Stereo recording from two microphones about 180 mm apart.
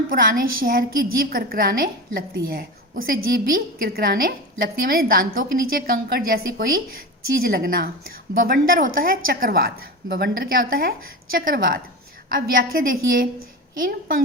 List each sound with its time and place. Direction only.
0.1 s a woman's voice: 50° right (ahead or behind)